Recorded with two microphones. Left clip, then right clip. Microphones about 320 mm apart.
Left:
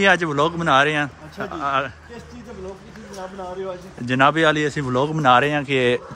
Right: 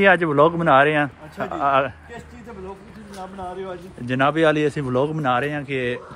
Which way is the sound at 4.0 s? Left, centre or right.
Centre.